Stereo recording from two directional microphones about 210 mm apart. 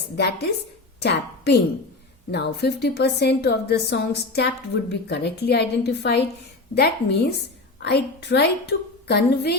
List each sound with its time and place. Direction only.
0.2 s a woman's voice: 50° left (ahead or behind)